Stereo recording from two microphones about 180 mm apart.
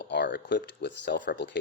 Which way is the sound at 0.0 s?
75° left (ahead or behind).